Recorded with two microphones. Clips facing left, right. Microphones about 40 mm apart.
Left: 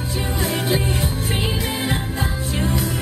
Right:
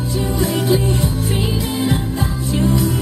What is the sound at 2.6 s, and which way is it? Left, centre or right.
Music, centre.